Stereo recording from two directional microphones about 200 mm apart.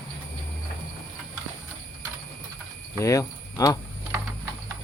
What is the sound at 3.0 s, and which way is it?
Speech, 15° left (ahead or behind).